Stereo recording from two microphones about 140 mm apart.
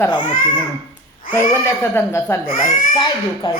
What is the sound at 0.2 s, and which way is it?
Speech, 60° left (ahead or behind).